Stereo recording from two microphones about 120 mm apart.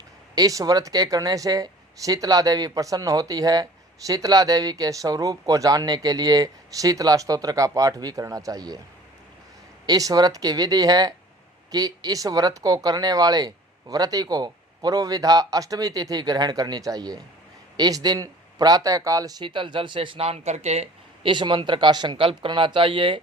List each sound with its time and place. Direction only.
0.3 s speech: 30° right (ahead or behind)
9.8 s speech: 30° right (ahead or behind); by 20.9 s 65° right (ahead or behind)
21.2 s speech: 40° right (ahead or behind)